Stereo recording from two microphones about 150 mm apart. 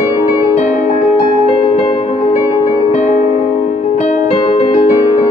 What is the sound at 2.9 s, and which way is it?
Music, 50° left (ahead or behind).